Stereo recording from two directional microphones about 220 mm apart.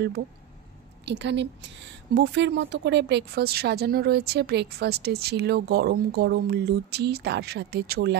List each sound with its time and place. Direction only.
1.0 s speech: 50° right (ahead or behind)